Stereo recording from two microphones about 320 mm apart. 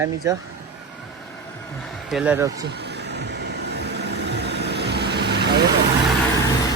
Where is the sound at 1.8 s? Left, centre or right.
Centre.